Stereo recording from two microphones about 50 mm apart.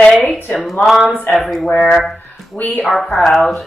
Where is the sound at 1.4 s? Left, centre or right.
Centre.